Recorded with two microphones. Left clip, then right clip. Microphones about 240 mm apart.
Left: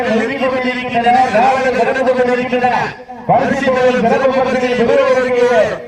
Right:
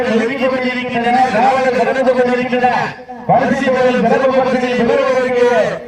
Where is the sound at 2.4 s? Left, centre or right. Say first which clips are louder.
Even; left.